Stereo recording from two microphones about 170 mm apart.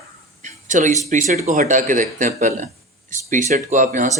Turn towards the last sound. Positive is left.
turn(degrees=-50)  # may be behind; listen again after turning